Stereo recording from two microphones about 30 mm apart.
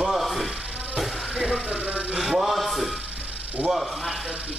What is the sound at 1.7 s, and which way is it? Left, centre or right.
Music, right.